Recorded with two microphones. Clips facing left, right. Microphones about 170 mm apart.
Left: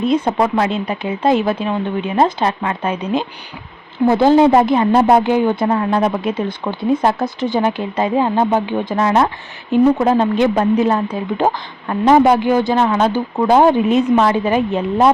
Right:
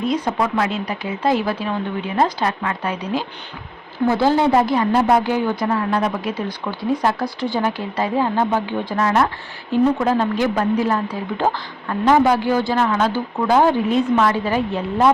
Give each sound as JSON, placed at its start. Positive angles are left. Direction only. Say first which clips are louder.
{"t": 0.0, "sound": "speech", "louder": "left 5 dB", "side_deg": 25}